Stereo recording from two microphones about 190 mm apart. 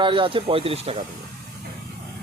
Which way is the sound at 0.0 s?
25° right (ahead or behind).